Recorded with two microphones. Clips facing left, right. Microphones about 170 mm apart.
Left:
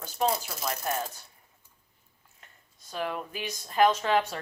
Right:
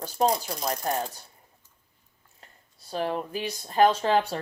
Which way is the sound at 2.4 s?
35° right (ahead or behind).